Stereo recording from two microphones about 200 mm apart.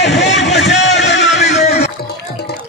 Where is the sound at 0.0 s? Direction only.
60° left (ahead or behind).